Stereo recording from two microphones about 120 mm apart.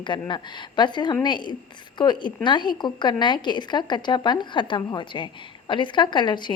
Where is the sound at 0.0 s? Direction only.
40° left (ahead or behind).